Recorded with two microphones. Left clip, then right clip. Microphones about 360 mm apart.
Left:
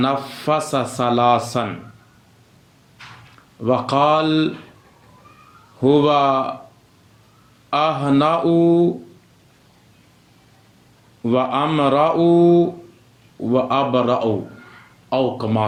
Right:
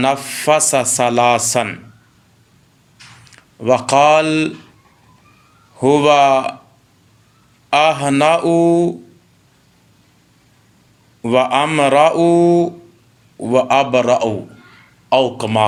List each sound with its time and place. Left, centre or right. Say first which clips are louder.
0.0 s speech: right 5 dB; centre
3.6 s speech: right 5 dB; centre
5.8 s speech: right 4 dB; centre
7.7 s speech: right 5 dB; right
11.2 s speech: right 5 dB; centre
15.4 s speech: right 5 dB; right